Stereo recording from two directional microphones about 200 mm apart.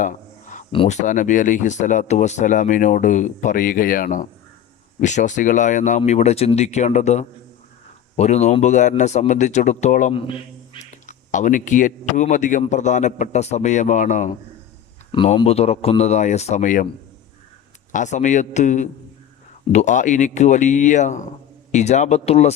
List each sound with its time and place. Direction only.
0.0 s a sound: 40° left (ahead or behind)
0.7 s speech: 30° left (ahead or behind)
10.9 s speech: 40° left (ahead or behind)
15.1 s speech: 25° left (ahead or behind)
17.9 s speech: 35° left (ahead or behind)